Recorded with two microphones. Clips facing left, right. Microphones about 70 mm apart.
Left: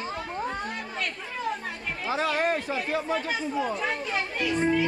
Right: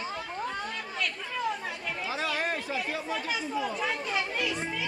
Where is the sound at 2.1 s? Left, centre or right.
Left.